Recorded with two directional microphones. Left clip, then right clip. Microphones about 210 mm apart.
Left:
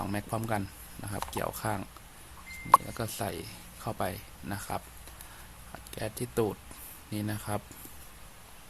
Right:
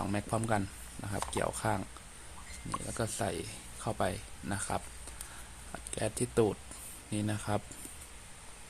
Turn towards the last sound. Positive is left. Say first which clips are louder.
# even
turn(degrees=0)  # may be behind; listen again after turning